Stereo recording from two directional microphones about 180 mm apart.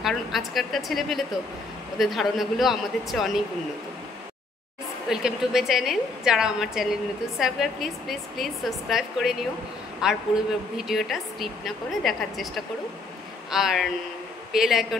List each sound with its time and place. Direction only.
0.0 s a woman's voice: centre (ahead or behind)
5.1 s a woman's voice: 5° right (ahead or behind)